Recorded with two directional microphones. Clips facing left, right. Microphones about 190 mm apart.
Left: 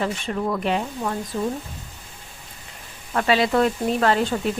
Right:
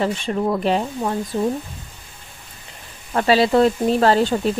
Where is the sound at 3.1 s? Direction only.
35° right (ahead or behind).